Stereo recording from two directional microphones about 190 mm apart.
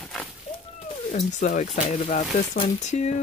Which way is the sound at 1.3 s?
40° left (ahead or behind).